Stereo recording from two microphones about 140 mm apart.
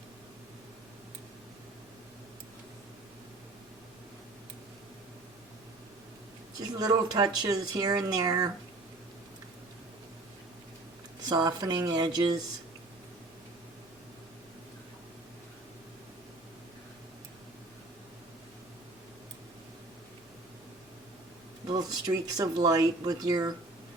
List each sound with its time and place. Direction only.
6.6 s speech: 25° right (ahead or behind)
11.3 s speech: 25° right (ahead or behind)
21.7 s speech: 25° right (ahead or behind)